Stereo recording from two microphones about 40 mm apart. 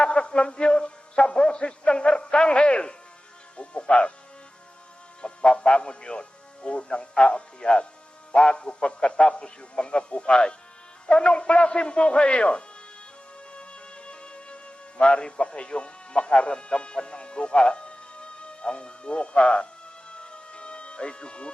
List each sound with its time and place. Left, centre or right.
0.0 s a man's voice: left
5.2 s a man's voice: left
13.5 s music: left